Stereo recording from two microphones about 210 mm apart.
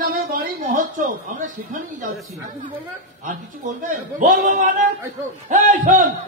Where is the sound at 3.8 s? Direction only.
40° right (ahead or behind).